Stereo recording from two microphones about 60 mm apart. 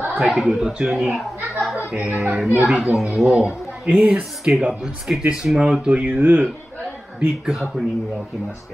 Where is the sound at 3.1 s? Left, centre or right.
Centre.